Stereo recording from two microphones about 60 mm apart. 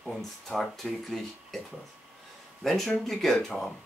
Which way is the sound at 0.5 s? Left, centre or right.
Left.